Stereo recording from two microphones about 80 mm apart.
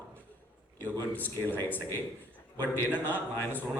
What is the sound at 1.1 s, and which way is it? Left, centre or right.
A man's voice, left.